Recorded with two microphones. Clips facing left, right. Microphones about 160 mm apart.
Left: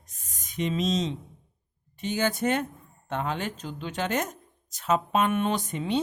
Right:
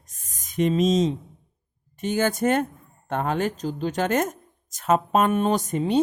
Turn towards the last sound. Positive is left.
turn(degrees=-40)  # may be behind; listen again after turning